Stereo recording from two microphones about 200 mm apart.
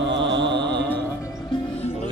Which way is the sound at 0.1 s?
60° right (ahead or behind).